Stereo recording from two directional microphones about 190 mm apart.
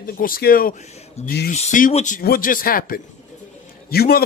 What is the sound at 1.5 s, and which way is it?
Speech, 40° left (ahead or behind).